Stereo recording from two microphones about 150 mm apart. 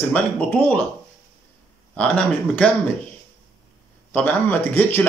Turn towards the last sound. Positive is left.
turn(degrees=15)  # may be behind; listen again after turning